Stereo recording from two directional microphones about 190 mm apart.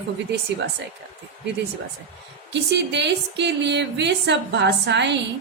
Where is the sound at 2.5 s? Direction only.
65° right (ahead or behind).